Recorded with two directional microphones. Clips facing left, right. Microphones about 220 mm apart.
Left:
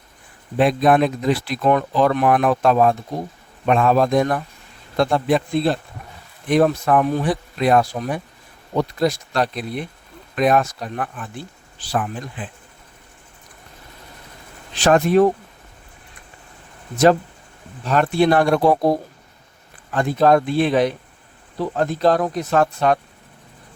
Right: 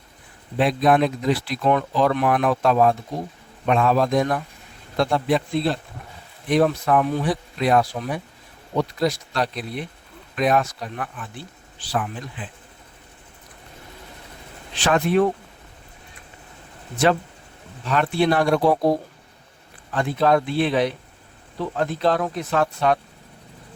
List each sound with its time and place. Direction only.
0.6 s speech: 50° left (ahead or behind)
14.8 s speech: 45° left (ahead or behind)
17.8 s speech: 45° left (ahead or behind)